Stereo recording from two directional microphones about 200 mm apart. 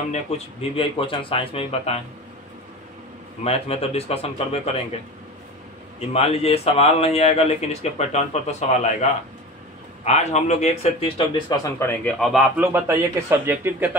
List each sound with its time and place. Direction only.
0.1 s speech: 30° left (ahead or behind)
3.4 s speech: 30° left (ahead or behind)
5.9 s a man's voice: 30° left (ahead or behind); by 13.9 s 10° right (ahead or behind)